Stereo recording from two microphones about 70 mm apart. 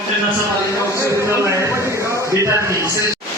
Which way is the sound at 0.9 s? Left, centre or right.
Right.